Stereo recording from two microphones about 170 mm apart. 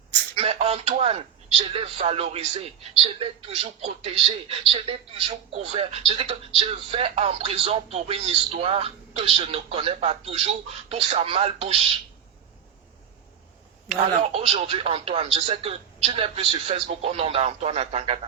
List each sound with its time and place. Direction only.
0.3 s a sound: 35° right (ahead or behind)
1.7 s speech: 35° right (ahead or behind)
13.8 s speech: 40° right (ahead or behind)